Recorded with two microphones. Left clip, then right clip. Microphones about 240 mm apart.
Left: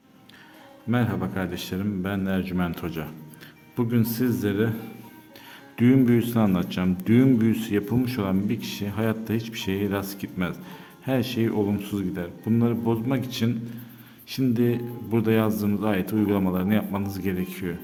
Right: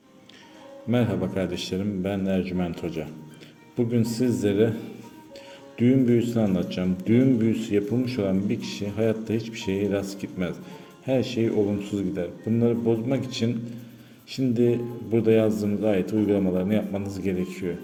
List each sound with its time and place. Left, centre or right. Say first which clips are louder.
0.9 s a man's voice: right 2 dB; centre
5.7 s speech: left 1 dB; left